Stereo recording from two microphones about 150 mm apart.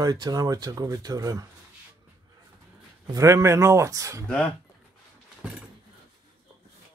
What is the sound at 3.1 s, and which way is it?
Speech, 20° right (ahead or behind).